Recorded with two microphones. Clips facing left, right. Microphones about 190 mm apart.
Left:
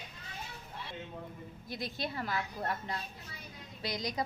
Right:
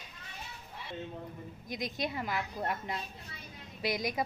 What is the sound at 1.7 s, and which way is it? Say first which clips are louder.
A woman's voice: right 3 dB; 15° right (ahead or behind).